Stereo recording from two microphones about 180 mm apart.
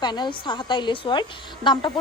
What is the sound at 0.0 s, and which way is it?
A woman's voice, 25° left (ahead or behind).